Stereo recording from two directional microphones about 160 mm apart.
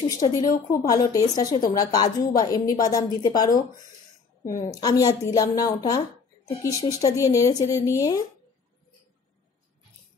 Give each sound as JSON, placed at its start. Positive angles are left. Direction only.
{"t": 0.2, "sound": "a woman's voice", "side_deg": 25}
{"t": 4.7, "sound": "a woman's voice", "side_deg": 25}